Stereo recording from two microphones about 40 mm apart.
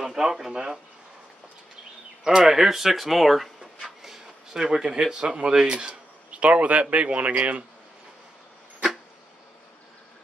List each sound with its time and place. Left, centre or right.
0.0 s speech: centre
2.2 s speech: centre; by 7.6 s right